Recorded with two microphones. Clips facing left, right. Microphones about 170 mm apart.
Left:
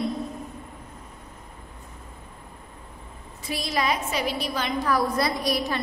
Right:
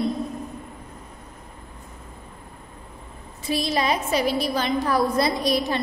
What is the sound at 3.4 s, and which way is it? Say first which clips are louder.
A woman's voice: right 3 dB; 25° right (ahead or behind).